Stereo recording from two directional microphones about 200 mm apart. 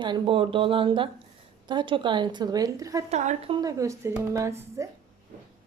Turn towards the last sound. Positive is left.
turn(degrees=-15)  # may be behind; listen again after turning